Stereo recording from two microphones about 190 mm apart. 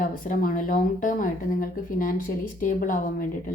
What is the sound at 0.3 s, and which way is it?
Speech, 45° left (ahead or behind).